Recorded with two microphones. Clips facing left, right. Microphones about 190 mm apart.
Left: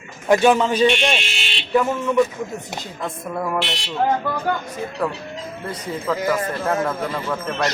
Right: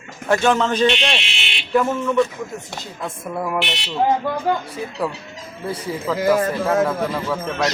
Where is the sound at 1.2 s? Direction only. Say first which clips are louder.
Left 2 dB; 45° left (ahead or behind).